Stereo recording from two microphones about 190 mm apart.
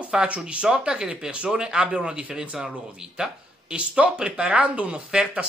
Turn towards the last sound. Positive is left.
turn(degrees=-5)  # may be behind; listen again after turning